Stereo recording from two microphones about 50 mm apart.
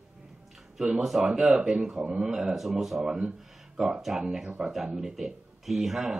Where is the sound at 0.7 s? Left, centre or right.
Centre.